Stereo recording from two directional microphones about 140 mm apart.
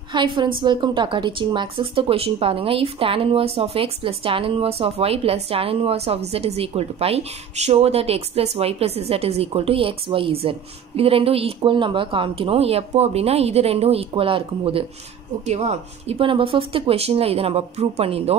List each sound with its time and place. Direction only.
0.1 s a woman's voice: 35° right (ahead or behind)
15.4 s speech: 50° right (ahead or behind)